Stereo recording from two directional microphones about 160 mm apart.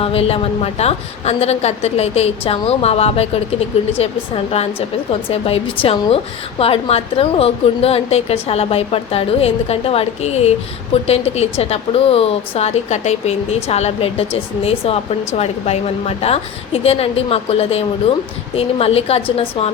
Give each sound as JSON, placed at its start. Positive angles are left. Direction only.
{"t": 0.0, "sound": "speech", "side_deg": 35}
{"t": 5.3, "sound": "speech", "side_deg": 35}